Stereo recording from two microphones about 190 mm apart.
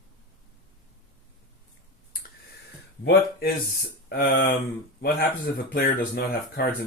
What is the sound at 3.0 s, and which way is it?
Speech, 55° left (ahead or behind).